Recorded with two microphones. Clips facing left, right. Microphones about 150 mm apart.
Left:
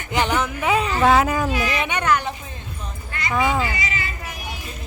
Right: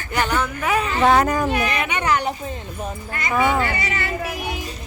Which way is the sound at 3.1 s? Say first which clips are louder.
Right 2 dB; 45° right (ahead or behind).